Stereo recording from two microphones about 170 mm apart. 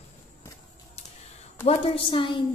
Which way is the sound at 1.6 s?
35° left (ahead or behind).